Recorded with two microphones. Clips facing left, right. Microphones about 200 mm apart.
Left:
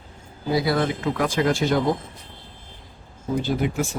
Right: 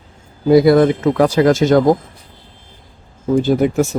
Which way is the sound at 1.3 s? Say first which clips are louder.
Right 7 dB; 75° right (ahead or behind).